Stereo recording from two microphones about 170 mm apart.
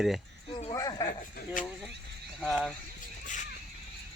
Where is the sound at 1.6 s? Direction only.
50° left (ahead or behind).